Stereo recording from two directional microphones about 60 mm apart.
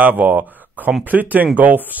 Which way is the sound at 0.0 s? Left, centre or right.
Right.